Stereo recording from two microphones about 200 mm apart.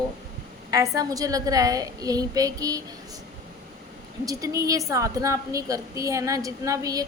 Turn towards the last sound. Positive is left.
turn(degrees=-15)  # may be behind; listen again after turning